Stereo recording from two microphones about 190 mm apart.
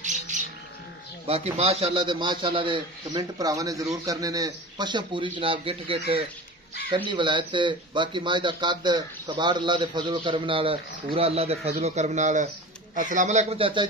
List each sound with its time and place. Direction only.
0.3 s bird: 40° right (ahead or behind)
1.2 s a man's voice: 30° right (ahead or behind)
7.1 s a man's voice: 25° right (ahead or behind)